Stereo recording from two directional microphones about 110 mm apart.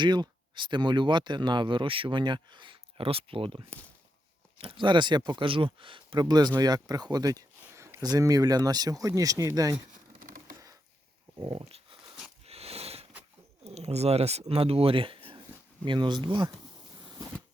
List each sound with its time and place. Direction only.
0.0 s speech: 45° right (ahead or behind); by 8.0 s 25° right (ahead or behind)
8.0 s speech: 35° right (ahead or behind)
12.5 s a sound: 65° right (ahead or behind)
13.7 s speech: 75° right (ahead or behind); by 16.5 s 45° right (ahead or behind)